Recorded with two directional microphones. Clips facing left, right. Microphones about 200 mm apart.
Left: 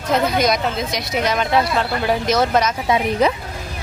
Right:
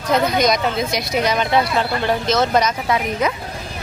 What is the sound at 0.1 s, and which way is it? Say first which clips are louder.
A woman's voice: right 1 dB; 5° left (ahead or behind).